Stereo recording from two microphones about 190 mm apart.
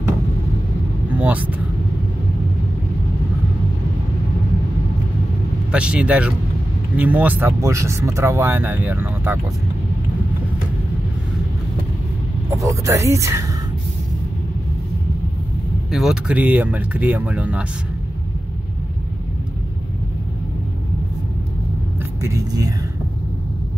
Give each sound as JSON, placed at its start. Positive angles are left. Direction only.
{"t": 1.1, "sound": "vehicle", "side_deg": -10}
{"t": 5.7, "sound": "speech", "side_deg": -5}
{"t": 12.6, "sound": "speech", "side_deg": -15}
{"t": 15.9, "sound": "speech", "side_deg": 0}
{"t": 22.2, "sound": "speech", "side_deg": -20}